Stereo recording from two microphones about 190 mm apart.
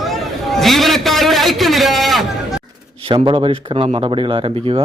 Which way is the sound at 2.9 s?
30° right (ahead or behind).